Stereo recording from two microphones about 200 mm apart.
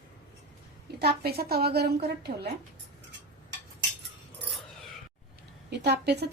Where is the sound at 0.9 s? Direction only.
50° right (ahead or behind).